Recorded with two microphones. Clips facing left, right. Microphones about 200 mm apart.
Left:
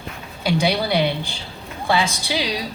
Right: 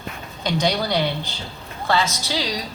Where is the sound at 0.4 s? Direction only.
10° left (ahead or behind).